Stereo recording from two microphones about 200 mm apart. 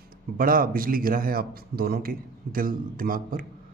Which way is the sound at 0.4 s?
45° right (ahead or behind).